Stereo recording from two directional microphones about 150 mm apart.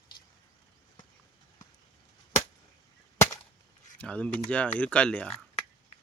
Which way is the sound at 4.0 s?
10° left (ahead or behind).